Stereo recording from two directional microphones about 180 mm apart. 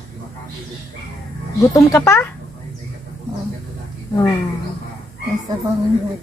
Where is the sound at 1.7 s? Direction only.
15° left (ahead or behind).